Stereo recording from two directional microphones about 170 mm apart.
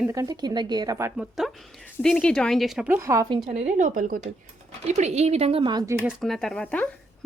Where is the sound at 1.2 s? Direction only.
Centre (ahead or behind).